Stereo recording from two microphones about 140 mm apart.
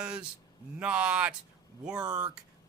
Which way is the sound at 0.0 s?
5° right (ahead or behind).